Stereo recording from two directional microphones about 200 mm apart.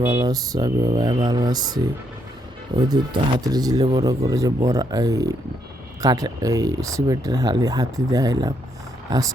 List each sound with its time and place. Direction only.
0.1 s speech: 20° right (ahead or behind)